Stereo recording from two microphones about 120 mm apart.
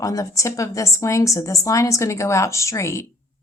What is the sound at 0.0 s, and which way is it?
Speech, 30° left (ahead or behind).